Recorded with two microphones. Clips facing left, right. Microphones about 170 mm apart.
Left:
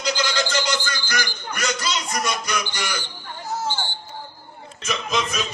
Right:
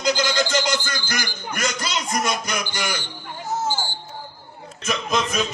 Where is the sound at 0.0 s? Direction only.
50° right (ahead or behind).